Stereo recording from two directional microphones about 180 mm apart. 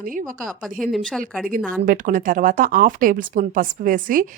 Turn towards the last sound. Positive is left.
turn(degrees=-50)  # may be behind; listen again after turning